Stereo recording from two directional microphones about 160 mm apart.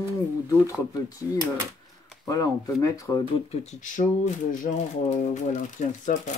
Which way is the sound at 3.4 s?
50° left (ahead or behind).